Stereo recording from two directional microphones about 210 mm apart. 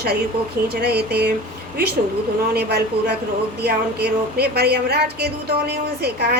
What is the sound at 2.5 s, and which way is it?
A woman's voice, 50° right (ahead or behind).